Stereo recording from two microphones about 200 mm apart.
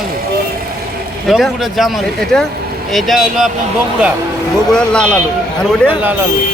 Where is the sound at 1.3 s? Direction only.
Centre (ahead or behind).